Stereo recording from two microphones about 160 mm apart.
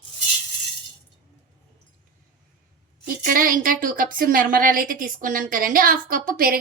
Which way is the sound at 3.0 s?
65° right (ahead or behind).